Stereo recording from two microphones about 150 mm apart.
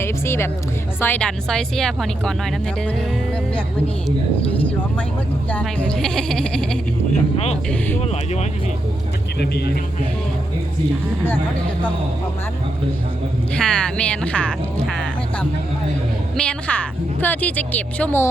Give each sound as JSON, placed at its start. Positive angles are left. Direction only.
{"t": 0.0, "sound": "a woman's voice", "side_deg": 15}
{"t": 4.5, "sound": "a woman's voice", "side_deg": 10}
{"t": 7.3, "sound": "speech", "side_deg": 45}
{"t": 9.4, "sound": "speech", "side_deg": 90}
{"t": 13.5, "sound": "a woman's voice", "side_deg": 5}